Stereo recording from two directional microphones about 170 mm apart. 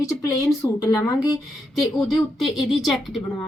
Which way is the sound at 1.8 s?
Centre (ahead or behind).